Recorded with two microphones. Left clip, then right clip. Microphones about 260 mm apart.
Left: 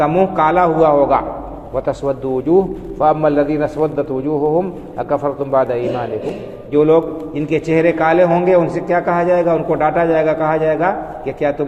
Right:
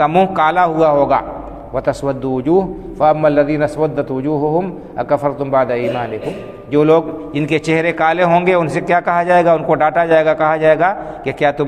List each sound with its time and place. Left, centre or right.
0.0 s a man's voice: right